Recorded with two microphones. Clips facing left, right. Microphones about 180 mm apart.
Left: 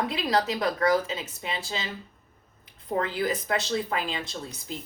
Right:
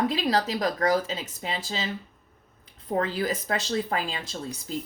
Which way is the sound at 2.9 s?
35° right (ahead or behind).